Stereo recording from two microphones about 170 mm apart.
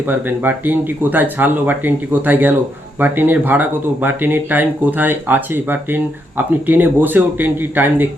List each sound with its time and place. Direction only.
0.1 s speech: 10° right (ahead or behind)